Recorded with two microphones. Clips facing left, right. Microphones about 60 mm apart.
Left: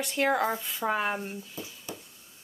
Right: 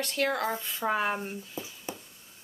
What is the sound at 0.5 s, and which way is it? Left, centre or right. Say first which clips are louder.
Speech: even; centre.